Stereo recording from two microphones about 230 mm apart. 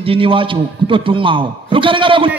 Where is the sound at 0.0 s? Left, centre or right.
Right.